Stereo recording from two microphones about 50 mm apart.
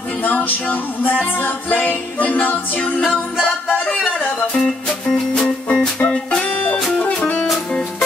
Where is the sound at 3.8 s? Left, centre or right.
Centre.